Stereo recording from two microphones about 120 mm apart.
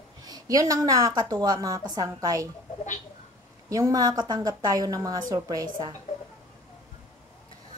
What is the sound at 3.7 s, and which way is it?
A woman's voice, 30° right (ahead or behind).